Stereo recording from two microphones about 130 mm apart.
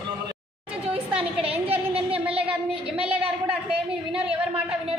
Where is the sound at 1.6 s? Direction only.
45° right (ahead or behind).